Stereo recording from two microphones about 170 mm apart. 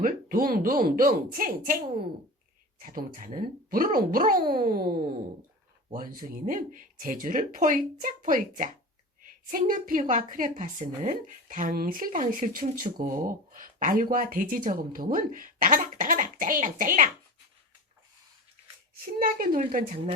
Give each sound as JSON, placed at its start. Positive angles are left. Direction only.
{"t": 0.0, "sound": "speech", "side_deg": -55}
{"t": 2.8, "sound": "a woman's voice", "side_deg": -55}
{"t": 19.0, "sound": "speech", "side_deg": -55}